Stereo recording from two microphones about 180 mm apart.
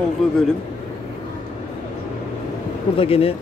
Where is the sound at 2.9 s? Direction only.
30° left (ahead or behind).